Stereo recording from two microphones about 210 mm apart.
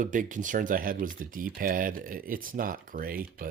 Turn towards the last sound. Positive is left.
turn(degrees=-40)  # may be behind; listen again after turning